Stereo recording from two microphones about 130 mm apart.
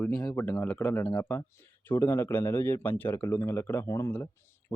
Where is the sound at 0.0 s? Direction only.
10° left (ahead or behind).